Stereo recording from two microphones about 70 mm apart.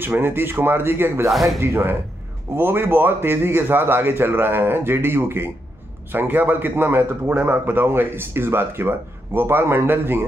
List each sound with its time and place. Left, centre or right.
0.0 s speech: right
1.3 s speech: centre
2.5 s speech: right